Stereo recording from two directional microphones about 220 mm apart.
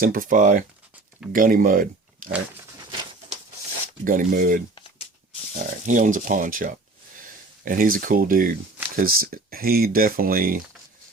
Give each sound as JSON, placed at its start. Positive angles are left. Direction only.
{"t": 0.0, "sound": "speech", "side_deg": -40}
{"t": 4.0, "sound": "speech", "side_deg": -35}